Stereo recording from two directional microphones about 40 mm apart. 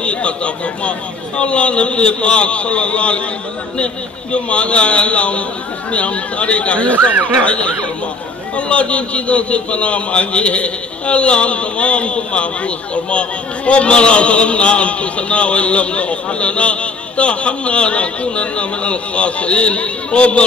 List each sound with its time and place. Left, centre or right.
0.0 s a man's voice: left